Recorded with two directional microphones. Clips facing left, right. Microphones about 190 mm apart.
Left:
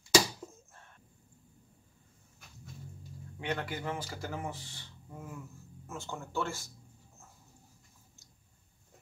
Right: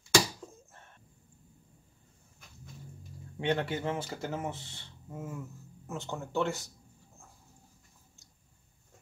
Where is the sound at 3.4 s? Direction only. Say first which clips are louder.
Right 5 dB; 30° right (ahead or behind).